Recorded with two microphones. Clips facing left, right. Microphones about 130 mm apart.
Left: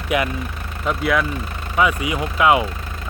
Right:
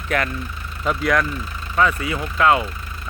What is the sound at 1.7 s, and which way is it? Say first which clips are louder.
Speech: left 1 dB; 15° left (ahead or behind).